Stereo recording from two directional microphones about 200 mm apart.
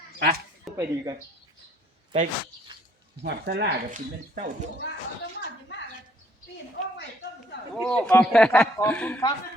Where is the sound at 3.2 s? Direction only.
60° right (ahead or behind).